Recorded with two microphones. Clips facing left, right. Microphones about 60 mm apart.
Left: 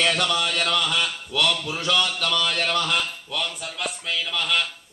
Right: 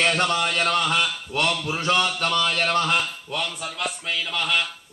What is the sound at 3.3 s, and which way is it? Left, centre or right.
Speech, centre.